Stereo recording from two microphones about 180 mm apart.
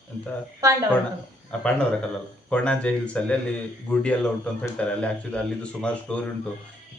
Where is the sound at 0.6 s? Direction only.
20° right (ahead or behind).